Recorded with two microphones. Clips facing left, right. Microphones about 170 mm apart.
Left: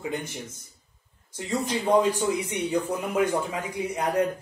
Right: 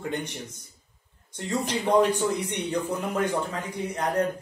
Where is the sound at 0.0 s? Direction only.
5° left (ahead or behind).